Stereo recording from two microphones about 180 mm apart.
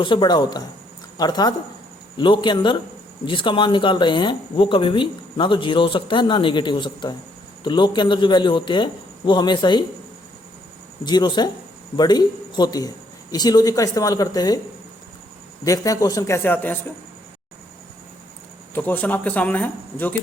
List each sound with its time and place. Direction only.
0.0 s speech: 25° left (ahead or behind)
11.0 s speech: 25° left (ahead or behind)
15.6 s speech: 20° left (ahead or behind)
18.7 s speech: 10° left (ahead or behind)